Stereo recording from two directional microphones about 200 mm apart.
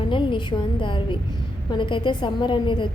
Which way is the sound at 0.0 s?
25° left (ahead or behind).